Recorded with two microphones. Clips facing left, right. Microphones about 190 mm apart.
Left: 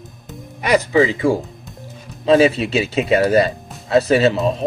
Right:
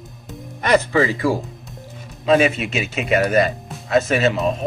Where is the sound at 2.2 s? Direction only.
30° left (ahead or behind).